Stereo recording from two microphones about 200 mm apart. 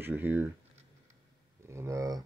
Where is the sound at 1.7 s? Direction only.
15° right (ahead or behind).